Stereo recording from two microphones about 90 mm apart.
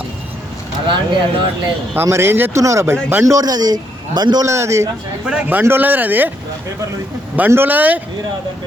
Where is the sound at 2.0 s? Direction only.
30° right (ahead or behind); by 4.4 s 50° right (ahead or behind).